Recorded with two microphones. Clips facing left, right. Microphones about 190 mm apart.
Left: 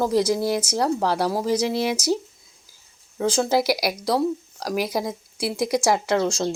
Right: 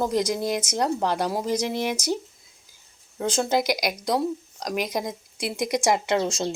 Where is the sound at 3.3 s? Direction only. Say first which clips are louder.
Left 3 dB; centre (ahead or behind).